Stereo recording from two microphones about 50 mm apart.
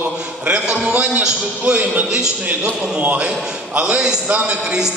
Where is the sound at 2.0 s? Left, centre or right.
Centre.